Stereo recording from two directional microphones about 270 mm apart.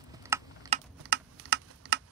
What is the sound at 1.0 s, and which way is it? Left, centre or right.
Typing, right.